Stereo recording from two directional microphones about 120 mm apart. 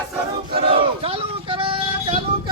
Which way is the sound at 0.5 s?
50° right (ahead or behind).